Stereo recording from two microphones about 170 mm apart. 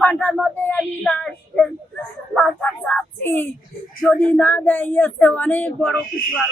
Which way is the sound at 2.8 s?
5° left (ahead or behind).